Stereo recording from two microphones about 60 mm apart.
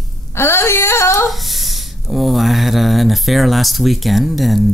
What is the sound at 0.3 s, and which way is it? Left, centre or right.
Speech, left.